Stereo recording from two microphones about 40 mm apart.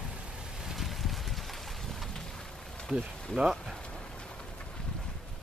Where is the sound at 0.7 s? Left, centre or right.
Centre.